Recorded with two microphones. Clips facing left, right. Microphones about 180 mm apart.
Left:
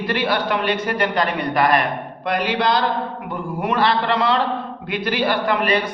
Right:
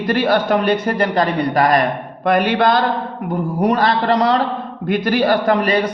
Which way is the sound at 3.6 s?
40° right (ahead or behind).